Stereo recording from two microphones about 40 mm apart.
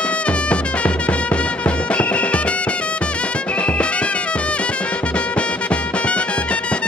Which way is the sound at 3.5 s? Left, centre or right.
Left.